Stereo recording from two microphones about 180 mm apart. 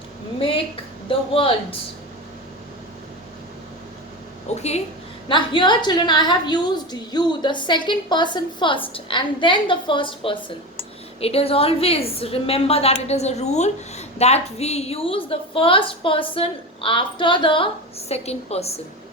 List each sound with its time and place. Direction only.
0.3 s a sound: 30° left (ahead or behind)
1.0 s a woman's voice: 30° left (ahead or behind)
4.4 s a woman's voice: 35° left (ahead or behind)
5.3 s a woman's voice: 25° left (ahead or behind)